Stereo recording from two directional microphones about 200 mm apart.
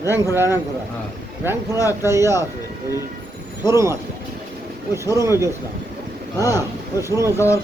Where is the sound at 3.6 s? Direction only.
15° right (ahead or behind).